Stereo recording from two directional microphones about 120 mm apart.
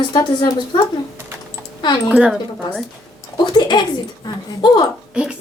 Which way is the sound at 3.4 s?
40° left (ahead or behind).